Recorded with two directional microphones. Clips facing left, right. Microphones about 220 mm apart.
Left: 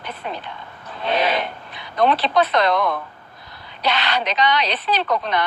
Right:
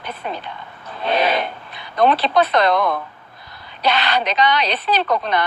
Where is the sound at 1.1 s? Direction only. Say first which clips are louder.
Right 2 dB; 45° right (ahead or behind).